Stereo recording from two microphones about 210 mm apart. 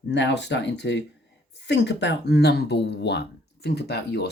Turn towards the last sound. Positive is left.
turn(degrees=50)  # may be behind; listen again after turning